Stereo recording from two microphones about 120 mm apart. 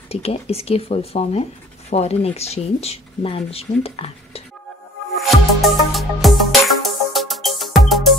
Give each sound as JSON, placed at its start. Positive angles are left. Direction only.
{"t": 0.1, "sound": "speech", "side_deg": 55}
{"t": 5.1, "sound": "music", "side_deg": 0}